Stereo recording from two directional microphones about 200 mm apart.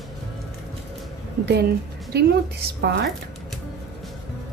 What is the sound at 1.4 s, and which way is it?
A woman's voice, 55° right (ahead or behind).